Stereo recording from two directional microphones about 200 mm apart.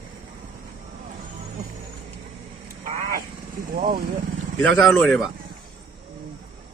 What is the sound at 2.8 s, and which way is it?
Vehicle, 40° right (ahead or behind).